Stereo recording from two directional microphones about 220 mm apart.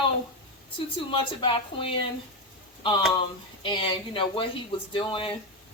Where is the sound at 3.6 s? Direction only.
25° left (ahead or behind).